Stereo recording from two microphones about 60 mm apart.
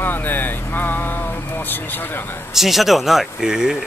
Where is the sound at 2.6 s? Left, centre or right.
Centre.